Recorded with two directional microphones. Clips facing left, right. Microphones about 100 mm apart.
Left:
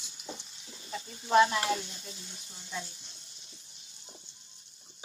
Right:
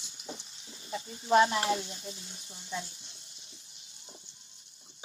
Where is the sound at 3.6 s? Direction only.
35° left (ahead or behind).